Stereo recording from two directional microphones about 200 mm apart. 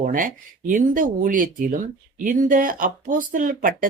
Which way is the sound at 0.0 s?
40° right (ahead or behind).